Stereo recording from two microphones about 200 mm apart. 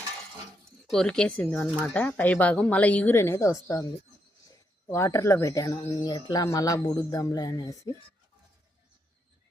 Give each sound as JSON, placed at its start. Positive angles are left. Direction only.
{"t": 0.9, "sound": "speech", "side_deg": 5}